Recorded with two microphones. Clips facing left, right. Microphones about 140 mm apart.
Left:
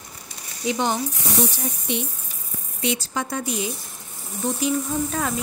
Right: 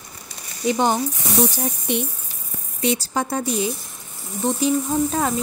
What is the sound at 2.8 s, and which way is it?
Speech, 35° right (ahead or behind).